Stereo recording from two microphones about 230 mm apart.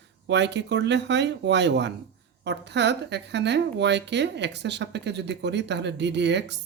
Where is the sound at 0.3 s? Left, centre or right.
Right.